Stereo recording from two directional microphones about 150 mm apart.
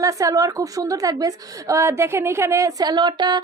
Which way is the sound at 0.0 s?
20° right (ahead or behind).